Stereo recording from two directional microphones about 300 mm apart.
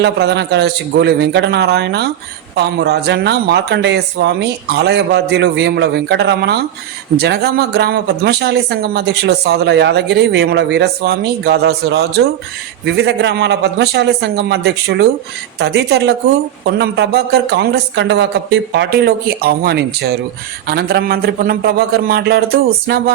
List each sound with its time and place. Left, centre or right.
0.0 s speech: right